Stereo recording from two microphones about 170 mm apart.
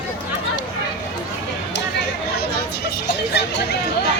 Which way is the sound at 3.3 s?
80° left.